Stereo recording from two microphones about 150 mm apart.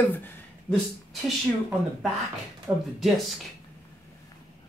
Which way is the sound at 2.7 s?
15° right (ahead or behind).